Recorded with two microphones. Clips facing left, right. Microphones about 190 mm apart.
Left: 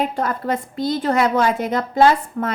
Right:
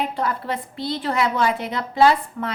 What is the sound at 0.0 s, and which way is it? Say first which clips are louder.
A woman's voice: left 3 dB; 45° left (ahead or behind).